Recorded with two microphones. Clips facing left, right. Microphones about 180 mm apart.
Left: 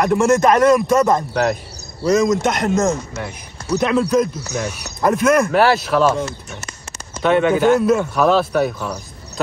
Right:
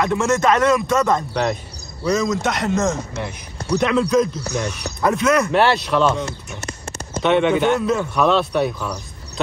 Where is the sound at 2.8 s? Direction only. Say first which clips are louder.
Left 2 dB; 5° left (ahead or behind).